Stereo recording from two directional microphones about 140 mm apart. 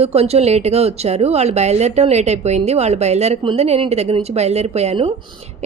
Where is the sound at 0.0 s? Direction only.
50° right (ahead or behind).